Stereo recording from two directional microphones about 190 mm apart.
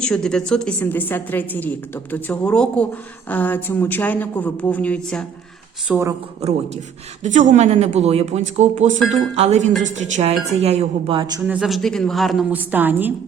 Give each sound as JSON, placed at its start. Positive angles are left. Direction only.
{"t": 0.0, "sound": "a woman's voice", "side_deg": 5}
{"t": 5.9, "sound": "speech", "side_deg": -15}
{"t": 7.2, "sound": "speech", "side_deg": -40}
{"t": 11.4, "sound": "a woman's voice", "side_deg": -5}